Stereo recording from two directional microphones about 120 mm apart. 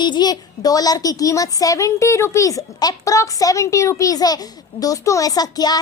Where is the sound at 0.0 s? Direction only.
35° left (ahead or behind).